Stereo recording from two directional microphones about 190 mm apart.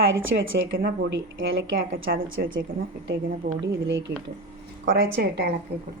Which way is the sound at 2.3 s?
90° right.